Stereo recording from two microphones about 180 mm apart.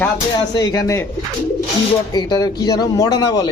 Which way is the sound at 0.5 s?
20° left (ahead or behind).